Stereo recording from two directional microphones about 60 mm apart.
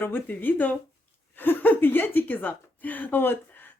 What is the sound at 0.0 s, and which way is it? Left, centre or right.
Speech, left.